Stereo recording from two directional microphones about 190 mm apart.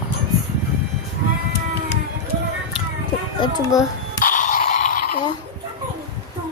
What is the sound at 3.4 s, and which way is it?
Child singing, 20° left (ahead or behind).